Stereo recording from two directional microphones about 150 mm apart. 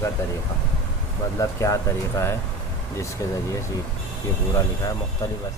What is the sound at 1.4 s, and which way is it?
Speech, 20° left (ahead or behind).